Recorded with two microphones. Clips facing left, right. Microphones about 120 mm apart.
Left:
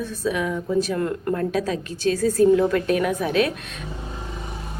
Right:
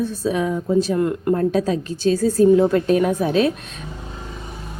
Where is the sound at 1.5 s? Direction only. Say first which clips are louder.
Right 4 dB; 30° right (ahead or behind).